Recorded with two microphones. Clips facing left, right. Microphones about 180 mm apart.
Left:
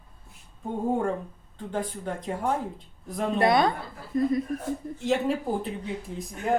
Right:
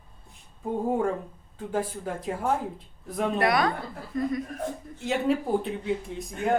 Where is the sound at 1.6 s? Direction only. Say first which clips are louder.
Right 2 dB; 5° right (ahead or behind).